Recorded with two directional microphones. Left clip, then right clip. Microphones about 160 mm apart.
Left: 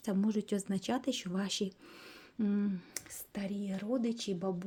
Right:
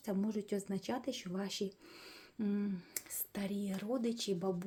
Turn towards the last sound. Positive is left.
turn(degrees=20)  # may be behind; listen again after turning